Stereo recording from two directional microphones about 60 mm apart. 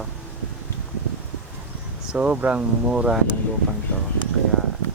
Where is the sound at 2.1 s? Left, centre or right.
Centre.